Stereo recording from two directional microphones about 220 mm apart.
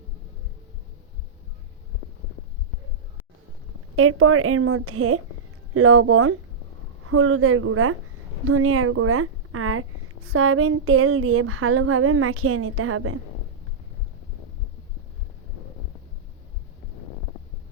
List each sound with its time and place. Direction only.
3.9 s speech: 80° right